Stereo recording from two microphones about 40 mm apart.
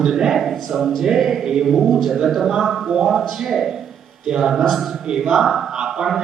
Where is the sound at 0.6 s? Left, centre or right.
Centre.